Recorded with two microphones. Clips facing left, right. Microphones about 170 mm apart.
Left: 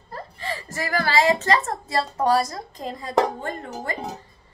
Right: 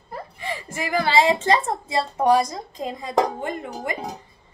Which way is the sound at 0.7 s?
20° right (ahead or behind).